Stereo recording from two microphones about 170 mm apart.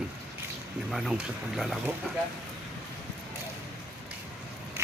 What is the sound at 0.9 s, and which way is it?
Speech, centre (ahead or behind).